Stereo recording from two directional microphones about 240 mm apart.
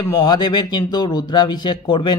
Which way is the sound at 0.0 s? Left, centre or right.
Centre.